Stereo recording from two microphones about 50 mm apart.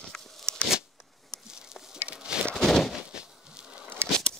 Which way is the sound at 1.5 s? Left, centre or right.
Centre.